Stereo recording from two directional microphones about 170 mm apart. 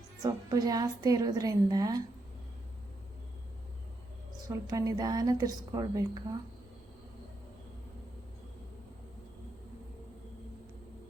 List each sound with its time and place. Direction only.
0.2 s a woman's voice: 20° right (ahead or behind)
4.4 s a woman's voice: 20° right (ahead or behind)